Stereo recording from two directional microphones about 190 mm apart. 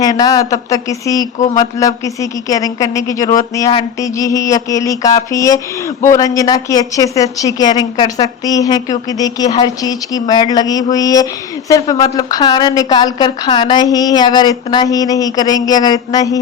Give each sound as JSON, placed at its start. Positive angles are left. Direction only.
{"t": 0.0, "sound": "a woman's voice", "side_deg": 20}
{"t": 1.5, "sound": "mantra", "side_deg": 15}
{"t": 6.1, "sound": "a woman's voice", "side_deg": 15}